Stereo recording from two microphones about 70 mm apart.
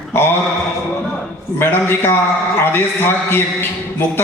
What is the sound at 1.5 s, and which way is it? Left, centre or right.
A man's voice, left.